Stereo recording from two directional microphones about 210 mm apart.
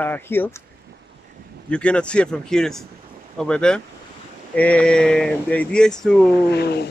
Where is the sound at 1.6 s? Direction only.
5° left (ahead or behind).